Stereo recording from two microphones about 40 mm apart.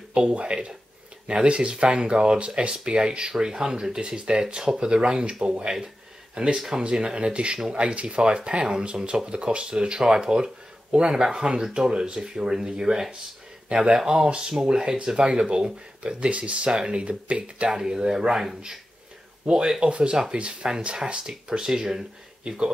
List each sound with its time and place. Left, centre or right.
0.1 s speech: right
17.6 s speech: centre
19.4 s speech: right